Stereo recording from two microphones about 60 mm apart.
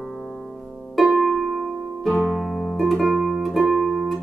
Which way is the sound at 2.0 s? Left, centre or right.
Centre.